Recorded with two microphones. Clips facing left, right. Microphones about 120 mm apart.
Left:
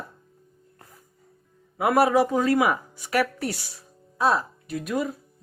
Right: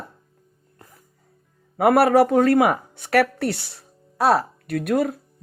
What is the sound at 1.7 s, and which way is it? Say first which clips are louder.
Speech: right 4 dB; 60° right (ahead or behind).